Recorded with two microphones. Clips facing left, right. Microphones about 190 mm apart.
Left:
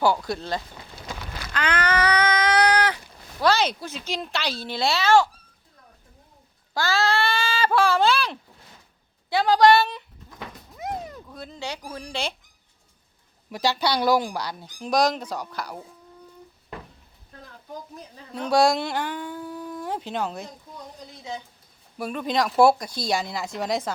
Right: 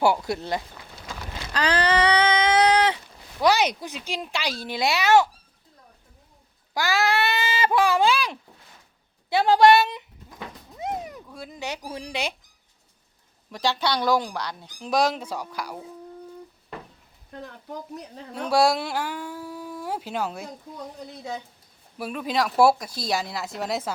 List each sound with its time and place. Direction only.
0.0 s speech: 25° right (ahead or behind)
1.5 s a sound: 35° right (ahead or behind)
3.4 s speech: 15° right (ahead or behind)
6.7 s speech: 15° right (ahead or behind)
9.3 s speech: 25° right (ahead or behind)
10.8 s a sound: 20° right (ahead or behind)
11.3 s speech: 10° right (ahead or behind)
13.5 s speech: 5° left (ahead or behind)
17.4 s speech: 70° right (ahead or behind)
18.3 s speech: 5° right (ahead or behind)
21.9 s speech: 5° right (ahead or behind)